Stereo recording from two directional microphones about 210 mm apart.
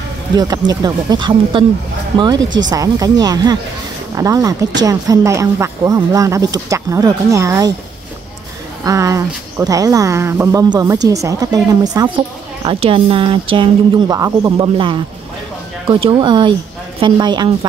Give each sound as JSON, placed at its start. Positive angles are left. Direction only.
{"t": 0.4, "sound": "speech", "side_deg": -20}
{"t": 2.7, "sound": "speech", "side_deg": -15}
{"t": 8.8, "sound": "speech", "side_deg": -15}